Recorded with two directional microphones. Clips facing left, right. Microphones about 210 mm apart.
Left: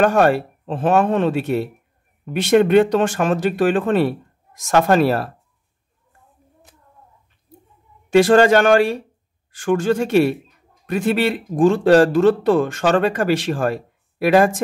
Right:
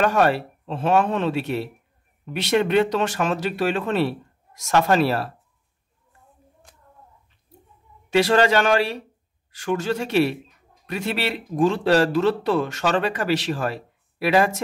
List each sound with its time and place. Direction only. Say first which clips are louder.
0.0 s speech: left 4 dB; 45° left (ahead or behind)
8.1 s speech: left 6 dB; 50° left (ahead or behind)